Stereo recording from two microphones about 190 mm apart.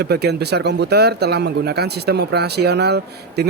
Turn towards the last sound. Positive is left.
turn(degrees=-60)  # may be behind; listen again after turning